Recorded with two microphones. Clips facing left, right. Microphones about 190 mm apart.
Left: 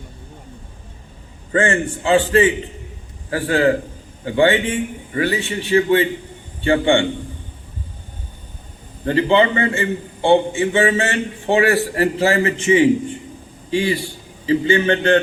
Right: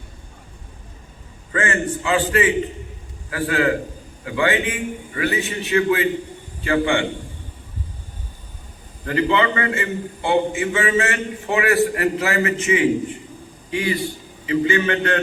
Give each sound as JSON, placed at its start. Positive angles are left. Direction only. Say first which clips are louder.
{"t": 1.5, "sound": "a man's voice", "louder": "left 4 dB", "side_deg": 30}
{"t": 9.0, "sound": "a man's voice", "louder": "left 4 dB", "side_deg": 30}